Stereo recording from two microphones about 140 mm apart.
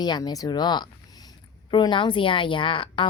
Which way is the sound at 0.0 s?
30° left (ahead or behind).